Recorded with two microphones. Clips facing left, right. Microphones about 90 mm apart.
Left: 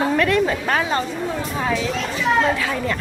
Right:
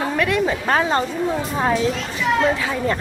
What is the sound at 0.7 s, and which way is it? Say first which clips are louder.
Speech: right 2 dB; 30° right (ahead or behind).